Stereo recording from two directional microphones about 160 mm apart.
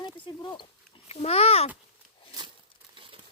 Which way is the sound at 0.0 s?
30° left (ahead or behind).